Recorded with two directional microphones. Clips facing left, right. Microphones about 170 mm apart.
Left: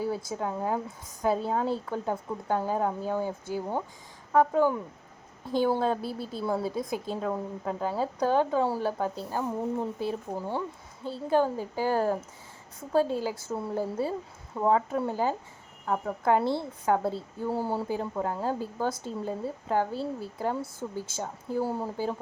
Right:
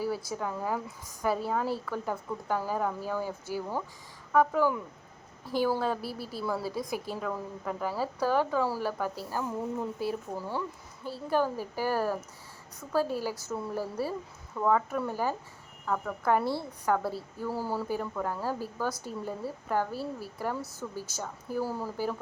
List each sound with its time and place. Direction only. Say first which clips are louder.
0.0 s a woman's voice: left 2 dB; 25° left (ahead or behind)